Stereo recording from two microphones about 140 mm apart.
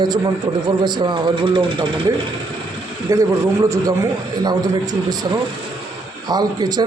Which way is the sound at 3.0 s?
20° right (ahead or behind).